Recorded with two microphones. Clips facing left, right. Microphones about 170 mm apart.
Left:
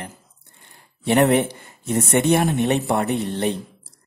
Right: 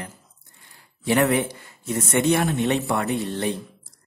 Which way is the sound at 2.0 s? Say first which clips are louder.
Left 3 dB; 25° left (ahead or behind).